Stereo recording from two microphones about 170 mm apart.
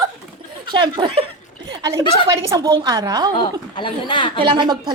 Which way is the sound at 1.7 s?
20° right (ahead or behind).